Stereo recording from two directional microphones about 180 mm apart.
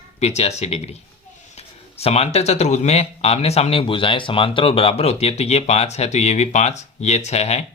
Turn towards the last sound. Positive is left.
turn(degrees=35)  # may be behind; listen again after turning